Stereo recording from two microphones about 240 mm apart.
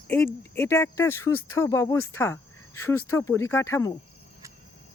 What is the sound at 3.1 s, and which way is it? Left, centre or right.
Speech, centre.